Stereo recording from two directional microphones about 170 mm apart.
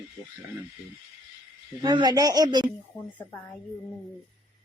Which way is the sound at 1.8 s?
25° right (ahead or behind).